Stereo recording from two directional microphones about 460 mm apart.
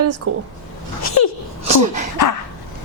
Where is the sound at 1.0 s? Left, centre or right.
Left.